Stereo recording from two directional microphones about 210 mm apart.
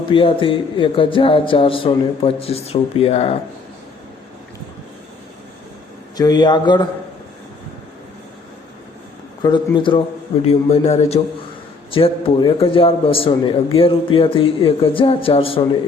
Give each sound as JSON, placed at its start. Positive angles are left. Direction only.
{"t": 0.1, "sound": "a man's voice", "side_deg": 25}
{"t": 6.1, "sound": "a man's voice", "side_deg": 20}
{"t": 9.4, "sound": "a man's voice", "side_deg": 20}